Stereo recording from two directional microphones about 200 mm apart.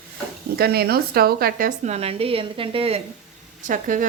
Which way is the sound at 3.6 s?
40° right (ahead or behind).